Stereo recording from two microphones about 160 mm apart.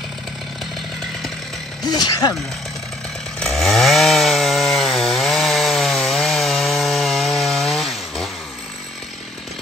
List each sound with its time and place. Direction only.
1.9 s speech: 25° left (ahead or behind)
3.3 s chainsaw: centre (ahead or behind)